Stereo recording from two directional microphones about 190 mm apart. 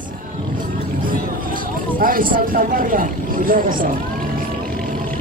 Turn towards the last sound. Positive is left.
turn(degrees=-45)  # may be behind; listen again after turning